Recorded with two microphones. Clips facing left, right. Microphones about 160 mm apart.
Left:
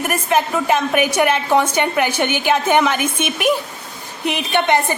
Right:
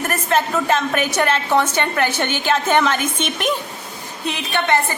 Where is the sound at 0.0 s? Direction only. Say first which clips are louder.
Left 2 dB; 15° left (ahead or behind).